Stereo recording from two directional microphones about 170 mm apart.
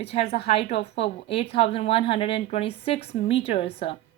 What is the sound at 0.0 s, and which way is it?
Speech, 35° left (ahead or behind).